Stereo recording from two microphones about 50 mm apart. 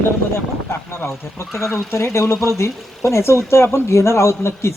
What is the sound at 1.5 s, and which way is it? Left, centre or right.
Speech, left.